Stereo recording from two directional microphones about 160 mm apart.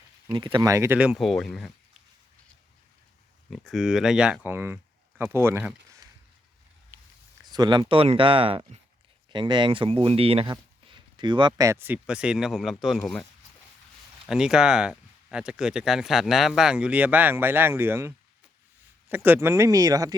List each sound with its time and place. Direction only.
0.3 s speech: 30° right (ahead or behind); by 1.7 s 5° left (ahead or behind)
3.5 s speech: centre (ahead or behind); by 6.1 s 15° right (ahead or behind)
6.9 s a sound: 15° right (ahead or behind)
7.5 s speech: 25° right (ahead or behind); by 13.2 s 5° left (ahead or behind)
14.3 s speech: 5° right (ahead or behind); by 20.1 s 20° right (ahead or behind)